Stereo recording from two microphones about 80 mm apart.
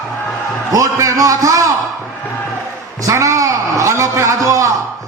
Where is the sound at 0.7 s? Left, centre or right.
Right.